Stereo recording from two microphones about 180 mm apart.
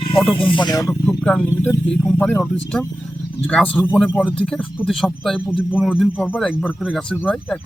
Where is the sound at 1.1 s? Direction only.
5° left (ahead or behind).